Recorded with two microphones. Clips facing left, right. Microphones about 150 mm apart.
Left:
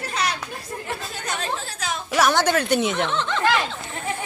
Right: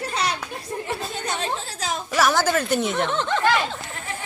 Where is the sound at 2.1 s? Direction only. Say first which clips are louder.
Left 1 dB; centre (ahead or behind).